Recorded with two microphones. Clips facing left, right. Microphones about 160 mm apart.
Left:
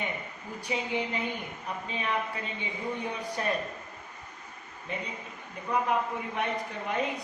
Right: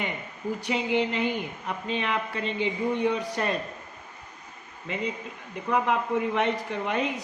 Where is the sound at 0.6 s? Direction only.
90° right.